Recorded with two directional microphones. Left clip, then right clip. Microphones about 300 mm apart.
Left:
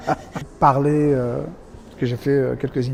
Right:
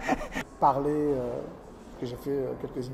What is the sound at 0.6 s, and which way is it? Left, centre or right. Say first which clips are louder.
Speech: left 8 dB; left.